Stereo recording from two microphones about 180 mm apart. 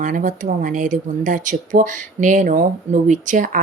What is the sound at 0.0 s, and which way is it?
Speech, 45° right (ahead or behind).